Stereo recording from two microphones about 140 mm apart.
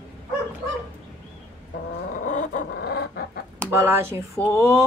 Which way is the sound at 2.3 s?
70° left (ahead or behind).